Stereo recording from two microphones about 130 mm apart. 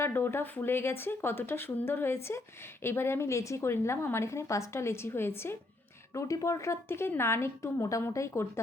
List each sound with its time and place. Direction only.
0.0 s a woman's voice: 15° left (ahead or behind)